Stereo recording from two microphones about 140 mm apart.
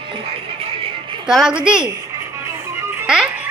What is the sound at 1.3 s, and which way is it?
Speech, 5° right (ahead or behind).